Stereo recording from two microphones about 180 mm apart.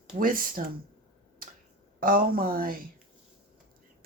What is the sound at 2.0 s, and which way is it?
Speech, 55° right (ahead or behind).